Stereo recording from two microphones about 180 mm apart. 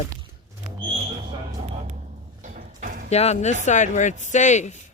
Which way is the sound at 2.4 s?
45° right (ahead or behind).